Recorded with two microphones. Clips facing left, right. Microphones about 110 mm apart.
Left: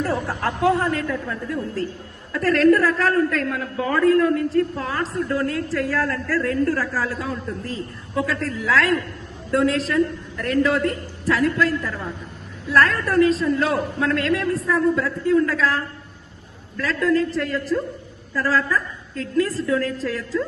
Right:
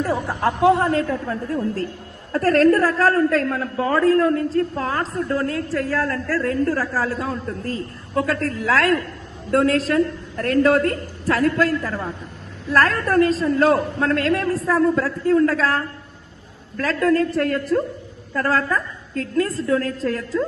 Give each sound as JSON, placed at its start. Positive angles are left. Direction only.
{"t": 0.0, "sound": "speech", "side_deg": -10}
{"t": 0.3, "sound": "a woman's voice", "side_deg": -20}
{"t": 5.9, "sound": "a woman's voice", "side_deg": -25}
{"t": 7.6, "sound": "a woman's voice", "side_deg": -45}